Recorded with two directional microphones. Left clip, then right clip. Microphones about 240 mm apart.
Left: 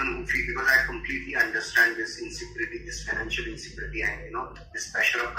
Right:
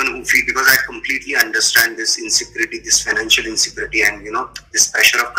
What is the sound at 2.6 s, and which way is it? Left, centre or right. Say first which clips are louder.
Speech: right 15 dB; right.